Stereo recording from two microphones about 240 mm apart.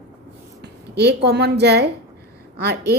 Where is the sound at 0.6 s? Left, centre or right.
Right.